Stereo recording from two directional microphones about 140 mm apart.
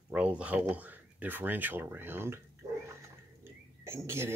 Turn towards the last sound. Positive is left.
turn(degrees=-20)  # may be behind; listen again after turning